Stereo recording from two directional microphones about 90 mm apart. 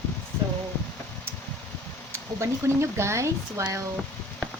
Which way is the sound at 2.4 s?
30° right (ahead or behind).